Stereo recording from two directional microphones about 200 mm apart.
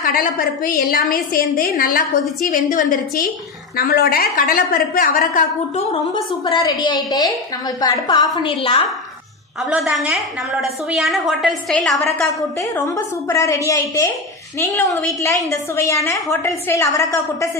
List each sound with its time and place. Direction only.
0.0 s a woman's voice: 45° left (ahead or behind)
6.1 s a woman's voice: 20° left (ahead or behind)
9.7 s a woman's voice: 5° right (ahead or behind)
12.7 s a woman's voice: 15° left (ahead or behind)
15.5 s a woman's voice: 15° left (ahead or behind)